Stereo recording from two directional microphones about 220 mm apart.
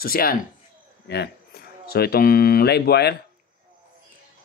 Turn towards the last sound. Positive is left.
turn(degrees=45)  # may be behind; listen again after turning